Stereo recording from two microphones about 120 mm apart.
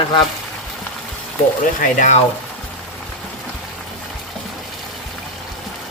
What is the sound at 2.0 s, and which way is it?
Speech, 90° left.